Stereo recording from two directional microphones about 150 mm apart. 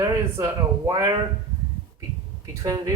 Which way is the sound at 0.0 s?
20° right (ahead or behind).